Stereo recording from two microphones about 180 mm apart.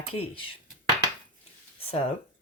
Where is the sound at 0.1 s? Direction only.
30° left (ahead or behind).